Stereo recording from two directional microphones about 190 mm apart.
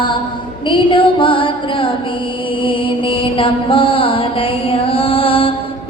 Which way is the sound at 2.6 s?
25° left (ahead or behind).